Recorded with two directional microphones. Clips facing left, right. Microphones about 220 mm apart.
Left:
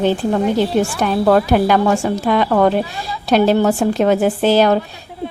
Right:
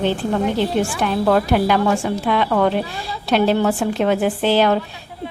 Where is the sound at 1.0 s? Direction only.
40° left (ahead or behind).